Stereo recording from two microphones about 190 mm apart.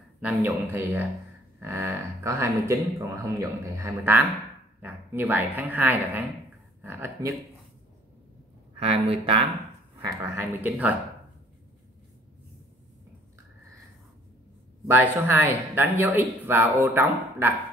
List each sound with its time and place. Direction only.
0.2 s speech: 10° right (ahead or behind)
8.7 s speech: 30° right (ahead or behind)
10.0 s speech: 15° right (ahead or behind)
14.9 s speech: 10° right (ahead or behind)